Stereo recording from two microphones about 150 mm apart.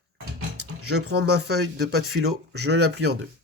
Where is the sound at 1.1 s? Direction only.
90° right.